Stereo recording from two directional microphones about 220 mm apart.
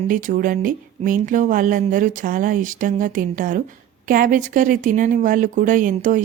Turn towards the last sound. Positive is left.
turn(degrees=-35)  # may be behind; listen again after turning